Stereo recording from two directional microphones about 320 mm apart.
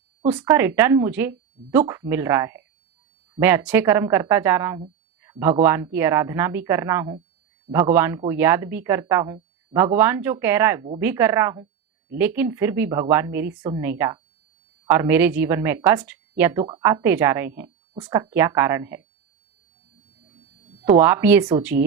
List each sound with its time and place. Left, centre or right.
0.3 s speech: centre
5.2 s a sound: centre
5.6 s speech: centre
20.8 s speech: centre